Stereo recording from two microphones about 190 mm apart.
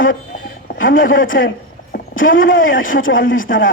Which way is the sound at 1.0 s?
90° left.